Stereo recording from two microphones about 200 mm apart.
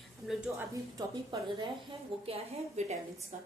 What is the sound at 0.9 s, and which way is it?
A woman's voice, 25° right (ahead or behind).